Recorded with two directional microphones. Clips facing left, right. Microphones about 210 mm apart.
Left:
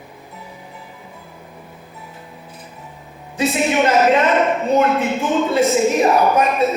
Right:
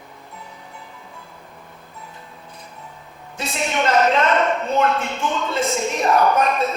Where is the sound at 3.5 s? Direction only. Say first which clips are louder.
Left 4 dB; 5° left (ahead or behind).